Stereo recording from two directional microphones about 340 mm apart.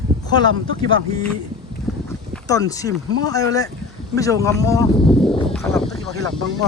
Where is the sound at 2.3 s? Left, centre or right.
Centre.